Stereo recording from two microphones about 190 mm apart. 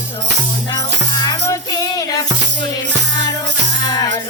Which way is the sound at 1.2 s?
20° left (ahead or behind).